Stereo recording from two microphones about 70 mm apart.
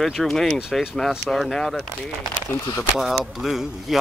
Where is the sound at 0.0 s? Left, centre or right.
Centre.